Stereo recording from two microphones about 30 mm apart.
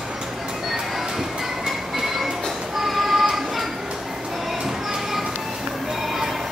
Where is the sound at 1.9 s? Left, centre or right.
Centre.